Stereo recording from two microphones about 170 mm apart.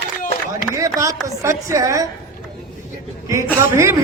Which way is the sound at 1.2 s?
15° right (ahead or behind).